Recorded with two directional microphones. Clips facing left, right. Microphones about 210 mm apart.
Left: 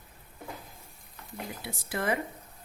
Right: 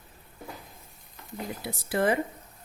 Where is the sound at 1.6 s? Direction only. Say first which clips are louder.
Right 5 dB; 30° right (ahead or behind).